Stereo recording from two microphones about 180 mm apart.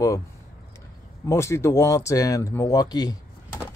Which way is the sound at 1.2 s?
15° left (ahead or behind).